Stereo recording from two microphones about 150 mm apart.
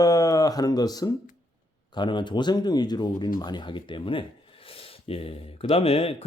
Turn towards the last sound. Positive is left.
turn(degrees=40)  # may be behind; listen again after turning